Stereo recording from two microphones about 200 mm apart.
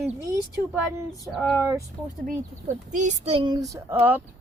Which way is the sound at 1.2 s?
Centre (ahead or behind).